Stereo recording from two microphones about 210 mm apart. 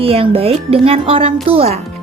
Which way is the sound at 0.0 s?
25° right (ahead or behind).